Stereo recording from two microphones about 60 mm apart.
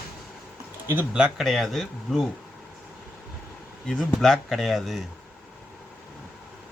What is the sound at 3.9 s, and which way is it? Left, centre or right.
Speech, centre.